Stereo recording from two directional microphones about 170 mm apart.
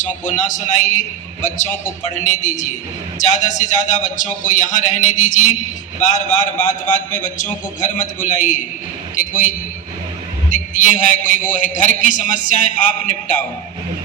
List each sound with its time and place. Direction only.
0.0 s a man's voice: 45° left (ahead or behind)